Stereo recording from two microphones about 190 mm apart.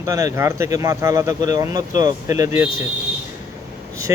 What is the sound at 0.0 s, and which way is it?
Speech, 15° right (ahead or behind).